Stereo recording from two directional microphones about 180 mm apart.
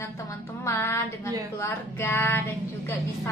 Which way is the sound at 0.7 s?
15° left (ahead or behind).